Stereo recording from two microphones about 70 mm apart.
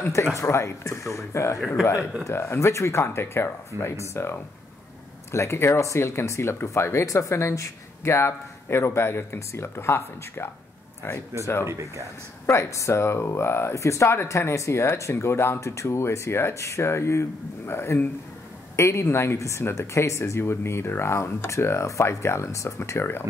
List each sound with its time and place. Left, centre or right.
0.1 s speech: left
12.4 s speech: left